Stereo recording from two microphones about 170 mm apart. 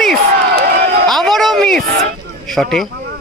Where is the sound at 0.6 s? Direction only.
65° right (ahead or behind).